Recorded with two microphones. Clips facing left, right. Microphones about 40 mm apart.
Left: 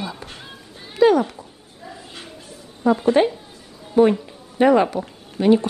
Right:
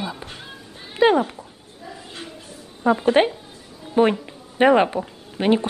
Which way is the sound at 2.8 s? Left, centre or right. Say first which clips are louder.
Left 1 dB; centre.